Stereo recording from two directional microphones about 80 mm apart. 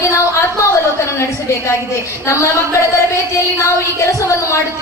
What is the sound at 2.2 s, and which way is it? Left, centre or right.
A woman's voice, left.